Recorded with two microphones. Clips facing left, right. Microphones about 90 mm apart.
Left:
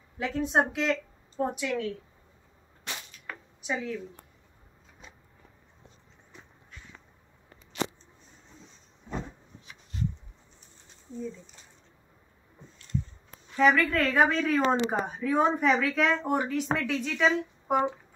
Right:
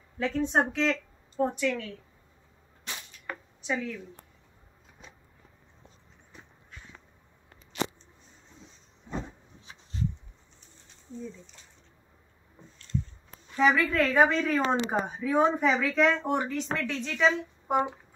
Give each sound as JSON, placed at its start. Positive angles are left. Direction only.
{"t": 0.2, "sound": "speech", "side_deg": 10}
{"t": 3.6, "sound": "speech", "side_deg": 10}
{"t": 13.6, "sound": "speech", "side_deg": 0}